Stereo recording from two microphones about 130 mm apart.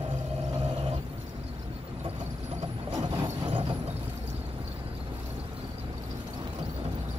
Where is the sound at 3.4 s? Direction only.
45° right (ahead or behind).